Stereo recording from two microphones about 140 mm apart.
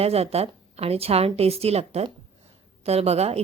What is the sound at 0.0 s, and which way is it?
A woman's voice, 45° right (ahead or behind).